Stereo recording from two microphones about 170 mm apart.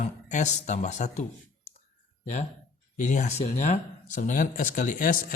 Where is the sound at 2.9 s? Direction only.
50° left (ahead or behind).